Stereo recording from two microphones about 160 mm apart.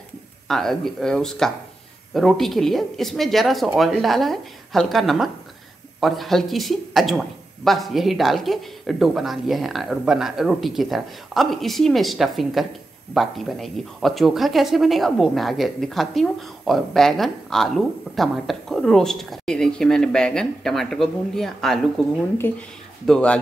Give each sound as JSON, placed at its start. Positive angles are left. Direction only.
{"t": 0.5, "sound": "a woman's voice", "side_deg": 0}
{"t": 22.4, "sound": "a woman's voice", "side_deg": 10}